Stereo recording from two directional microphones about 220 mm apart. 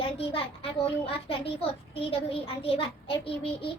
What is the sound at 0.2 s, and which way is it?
Speech, 25° left (ahead or behind).